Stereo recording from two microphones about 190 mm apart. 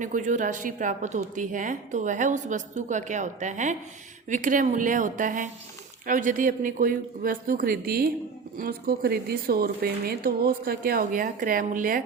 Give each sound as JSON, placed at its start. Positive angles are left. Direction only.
{"t": 0.0, "sound": "a woman's voice", "side_deg": -45}